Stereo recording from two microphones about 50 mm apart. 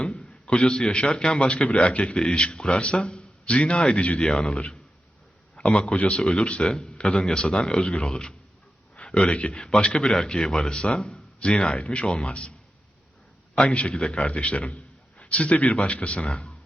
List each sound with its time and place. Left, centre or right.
0.0 s a man's voice: centre
13.6 s a man's voice: left